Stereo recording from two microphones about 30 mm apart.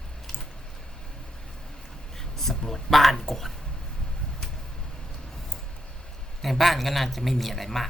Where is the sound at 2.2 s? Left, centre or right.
Centre.